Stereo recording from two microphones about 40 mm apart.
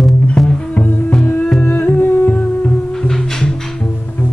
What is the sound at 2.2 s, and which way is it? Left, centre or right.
Music, left.